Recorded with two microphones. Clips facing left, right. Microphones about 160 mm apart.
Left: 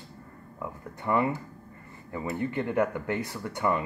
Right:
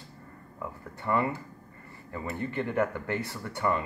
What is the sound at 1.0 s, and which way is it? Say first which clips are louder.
Speech: left 2 dB; 15° left (ahead or behind).